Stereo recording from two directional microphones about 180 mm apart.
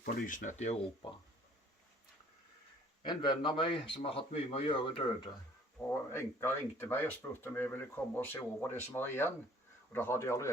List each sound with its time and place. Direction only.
0.0 s speech: 50° left (ahead or behind); by 1.1 s 35° left (ahead or behind)
3.0 s a man's voice: 25° left (ahead or behind)
5.9 s speech: 15° left (ahead or behind)